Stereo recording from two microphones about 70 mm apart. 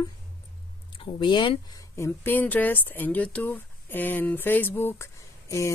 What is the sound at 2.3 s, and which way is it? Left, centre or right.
Speech, left.